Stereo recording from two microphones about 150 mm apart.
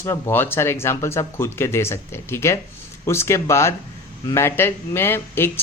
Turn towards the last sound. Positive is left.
turn(degrees=15)  # may be behind; listen again after turning